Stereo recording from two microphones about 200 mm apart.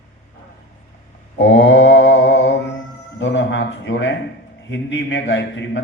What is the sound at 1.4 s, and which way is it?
Mantra, 65° left (ahead or behind).